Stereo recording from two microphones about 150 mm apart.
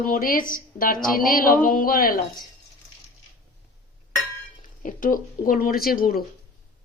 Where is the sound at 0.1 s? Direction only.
70° left (ahead or behind).